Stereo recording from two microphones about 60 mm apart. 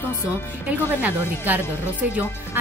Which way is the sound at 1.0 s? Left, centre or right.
Right.